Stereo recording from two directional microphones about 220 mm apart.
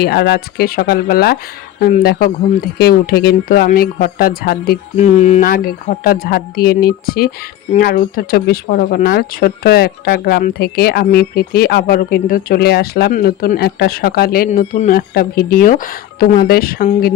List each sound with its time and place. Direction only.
0.0 s speech: 45° left (ahead or behind)